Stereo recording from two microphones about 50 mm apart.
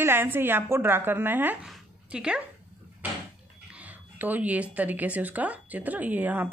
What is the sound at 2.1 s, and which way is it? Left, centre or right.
Speech, centre.